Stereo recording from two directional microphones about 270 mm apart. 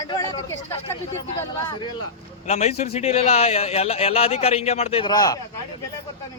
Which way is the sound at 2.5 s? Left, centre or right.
Left.